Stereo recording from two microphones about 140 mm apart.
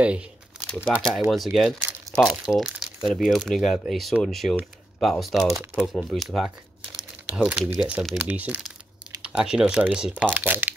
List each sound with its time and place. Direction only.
0.7 s speech: 5° left (ahead or behind)
5.5 s speech: 15° right (ahead or behind)
5.9 s speech: centre (ahead or behind); by 10.7 s 15° right (ahead or behind)